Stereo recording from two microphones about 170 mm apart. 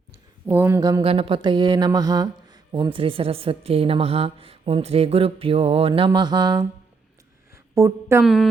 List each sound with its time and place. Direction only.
0.4 s speech: 15° right (ahead or behind)
1.0 s speech: 35° right (ahead or behind)
6.1 s mantra: 25° right (ahead or behind)
7.5 s speech: 15° right (ahead or behind)
8.2 s speech: centre (ahead or behind)